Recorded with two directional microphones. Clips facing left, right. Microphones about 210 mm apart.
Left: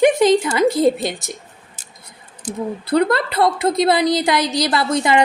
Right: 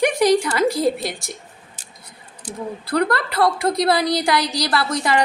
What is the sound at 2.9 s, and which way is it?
A woman's voice, 25° left (ahead or behind).